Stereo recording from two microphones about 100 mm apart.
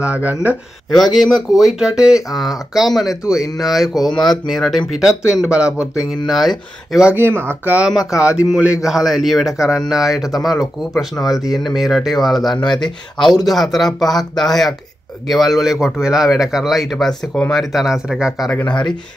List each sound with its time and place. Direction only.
0.0 s speech: 15° right (ahead or behind)
0.9 s a man's voice: centre (ahead or behind)
5.2 s a man's voice: 10° right (ahead or behind)
7.2 s a man's voice: 20° right (ahead or behind); by 12.5 s centre (ahead or behind)
12.5 s speech: 50° left (ahead or behind)
13.5 s a man's voice: centre (ahead or behind)